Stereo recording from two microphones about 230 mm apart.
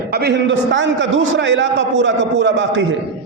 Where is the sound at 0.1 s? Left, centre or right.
Right.